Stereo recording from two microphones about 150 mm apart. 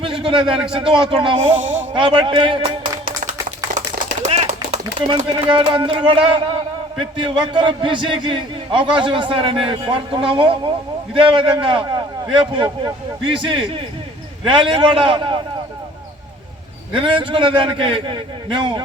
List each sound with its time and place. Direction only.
0.0 s a sound: 35° right (ahead or behind)
0.4 s a man's voice: 5° right (ahead or behind)
0.7 s a man's voice: 35° right (ahead or behind)
4.2 s typewriter: 50° right (ahead or behind)
5.0 s a man's voice: 30° right (ahead or behind)
16.9 s a man's voice: 35° right (ahead or behind)